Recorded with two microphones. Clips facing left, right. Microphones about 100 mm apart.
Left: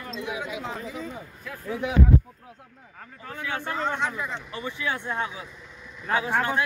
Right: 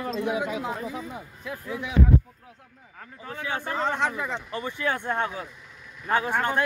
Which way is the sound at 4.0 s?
55° right (ahead or behind).